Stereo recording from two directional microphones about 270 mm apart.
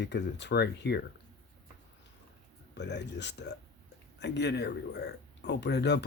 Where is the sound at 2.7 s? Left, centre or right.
Left.